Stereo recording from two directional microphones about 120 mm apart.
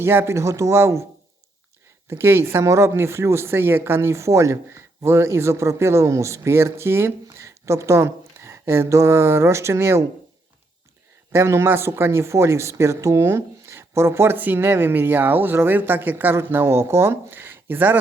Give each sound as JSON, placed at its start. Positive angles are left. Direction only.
{"t": 0.0, "sound": "speech", "side_deg": -20}
{"t": 2.0, "sound": "speech", "side_deg": -20}
{"t": 11.3, "sound": "speech", "side_deg": -20}